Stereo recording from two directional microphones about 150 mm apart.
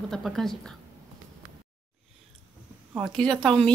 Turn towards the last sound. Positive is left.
turn(degrees=5)  # may be behind; listen again after turning